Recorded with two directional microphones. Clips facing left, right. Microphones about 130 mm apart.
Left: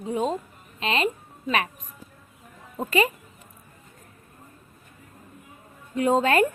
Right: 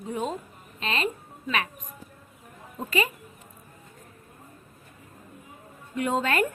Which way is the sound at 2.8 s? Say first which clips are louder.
Left 4 dB; 40° left (ahead or behind).